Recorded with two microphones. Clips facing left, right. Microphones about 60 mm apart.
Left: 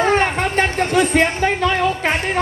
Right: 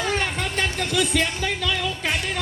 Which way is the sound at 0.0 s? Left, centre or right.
Left.